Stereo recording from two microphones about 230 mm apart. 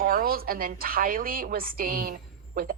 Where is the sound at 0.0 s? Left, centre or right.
Right.